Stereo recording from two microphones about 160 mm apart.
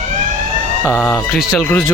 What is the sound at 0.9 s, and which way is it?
Speech, 15° left (ahead or behind).